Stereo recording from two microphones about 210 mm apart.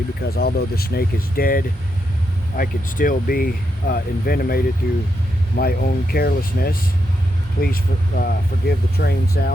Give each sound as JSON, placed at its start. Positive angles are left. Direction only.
{"t": 0.2, "sound": "speech", "side_deg": 50}